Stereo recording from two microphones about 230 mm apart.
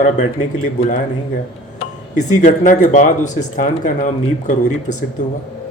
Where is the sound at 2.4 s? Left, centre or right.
Left.